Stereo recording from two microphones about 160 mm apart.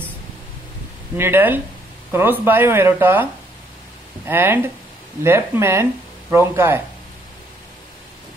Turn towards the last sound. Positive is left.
turn(degrees=-15)  # may be behind; listen again after turning